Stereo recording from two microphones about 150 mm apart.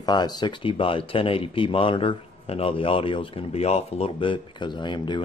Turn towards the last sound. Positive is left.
turn(degrees=30)  # may be behind; listen again after turning